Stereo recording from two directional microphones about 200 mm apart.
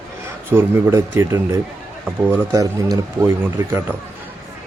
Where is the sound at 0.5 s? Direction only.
10° right (ahead or behind).